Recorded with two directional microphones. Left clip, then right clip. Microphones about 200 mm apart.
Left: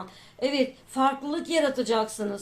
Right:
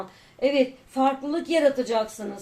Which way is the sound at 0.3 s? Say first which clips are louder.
Right 4 dB; 45° left (ahead or behind).